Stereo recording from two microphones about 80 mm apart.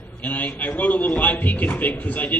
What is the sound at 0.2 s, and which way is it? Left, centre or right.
A man's voice, left.